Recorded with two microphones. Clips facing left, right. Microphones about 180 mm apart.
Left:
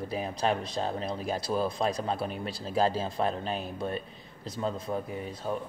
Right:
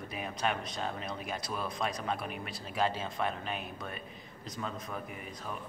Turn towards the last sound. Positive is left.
turn(degrees=30)  # may be behind; listen again after turning